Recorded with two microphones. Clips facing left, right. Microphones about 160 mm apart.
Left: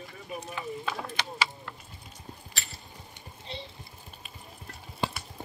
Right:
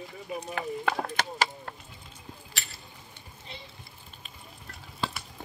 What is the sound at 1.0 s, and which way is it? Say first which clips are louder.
Speech: right 3 dB; 45° right (ahead or behind).